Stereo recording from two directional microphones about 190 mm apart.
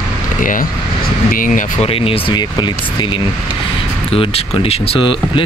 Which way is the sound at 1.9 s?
30° left (ahead or behind).